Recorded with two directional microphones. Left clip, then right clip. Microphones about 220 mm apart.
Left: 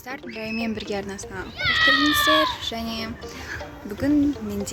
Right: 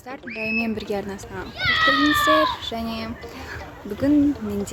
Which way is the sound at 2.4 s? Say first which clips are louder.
Right 1 dB; 5° right (ahead or behind).